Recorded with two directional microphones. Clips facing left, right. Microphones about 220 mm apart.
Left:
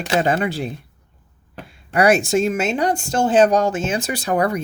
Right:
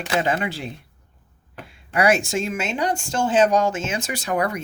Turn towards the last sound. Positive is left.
turn(degrees=35)  # may be behind; listen again after turning